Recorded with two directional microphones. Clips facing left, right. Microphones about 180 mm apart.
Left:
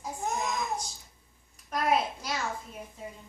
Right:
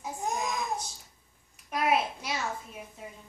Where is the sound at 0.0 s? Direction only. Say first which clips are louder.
Even; 15° right (ahead or behind).